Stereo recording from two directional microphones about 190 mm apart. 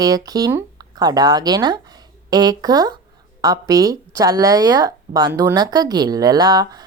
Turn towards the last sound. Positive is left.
turn(degrees=-20)  # may be behind; listen again after turning